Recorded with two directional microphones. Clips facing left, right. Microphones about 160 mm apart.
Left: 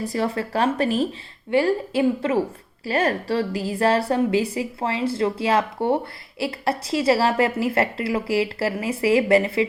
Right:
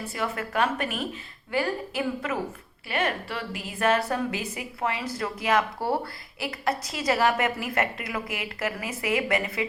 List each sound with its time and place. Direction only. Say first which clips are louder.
0.0 s a woman's voice: left 7 dB; 35° left (ahead or behind)